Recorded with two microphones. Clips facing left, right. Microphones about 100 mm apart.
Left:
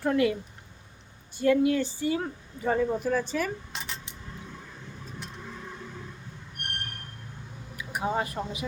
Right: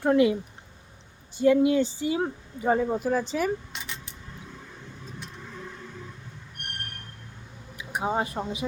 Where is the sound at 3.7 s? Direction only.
30° left (ahead or behind).